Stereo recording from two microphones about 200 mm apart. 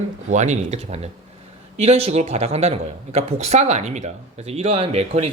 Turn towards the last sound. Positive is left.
turn(degrees=-30)  # may be behind; listen again after turning